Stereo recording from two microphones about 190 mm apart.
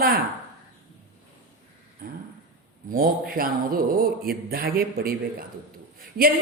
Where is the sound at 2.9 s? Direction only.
50° right (ahead or behind).